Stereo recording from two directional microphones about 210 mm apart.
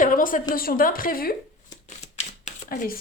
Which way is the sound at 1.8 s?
30° left (ahead or behind).